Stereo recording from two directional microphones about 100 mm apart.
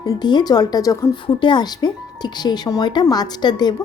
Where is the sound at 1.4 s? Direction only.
50° left (ahead or behind).